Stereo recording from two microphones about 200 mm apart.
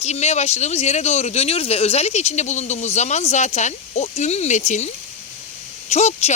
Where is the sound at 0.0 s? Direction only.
35° left (ahead or behind).